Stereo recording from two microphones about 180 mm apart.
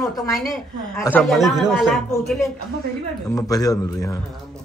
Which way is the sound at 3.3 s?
20° left (ahead or behind).